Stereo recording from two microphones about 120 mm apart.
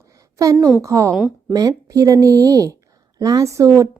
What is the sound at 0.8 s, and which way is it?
A woman's voice, 25° right (ahead or behind).